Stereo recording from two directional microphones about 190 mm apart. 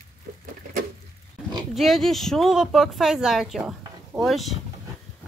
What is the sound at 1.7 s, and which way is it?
Speech, centre (ahead or behind).